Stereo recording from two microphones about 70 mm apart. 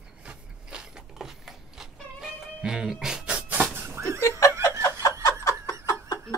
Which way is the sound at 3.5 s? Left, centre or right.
Right.